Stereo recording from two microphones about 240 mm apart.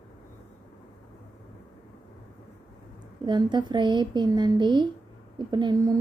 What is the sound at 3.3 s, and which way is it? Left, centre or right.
A woman's voice, centre.